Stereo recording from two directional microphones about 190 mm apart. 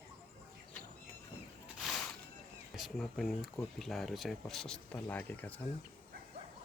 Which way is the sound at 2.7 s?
Centre (ahead or behind).